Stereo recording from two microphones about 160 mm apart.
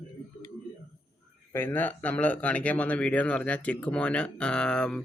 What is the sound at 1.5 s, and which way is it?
Speech, 15° left (ahead or behind).